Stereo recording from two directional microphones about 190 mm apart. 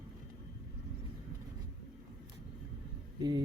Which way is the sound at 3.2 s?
20° right (ahead or behind).